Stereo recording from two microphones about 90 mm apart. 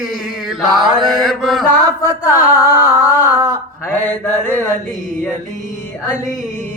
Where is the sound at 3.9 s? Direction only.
25° left (ahead or behind).